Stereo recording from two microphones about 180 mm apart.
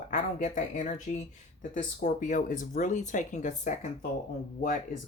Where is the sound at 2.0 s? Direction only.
45° left (ahead or behind).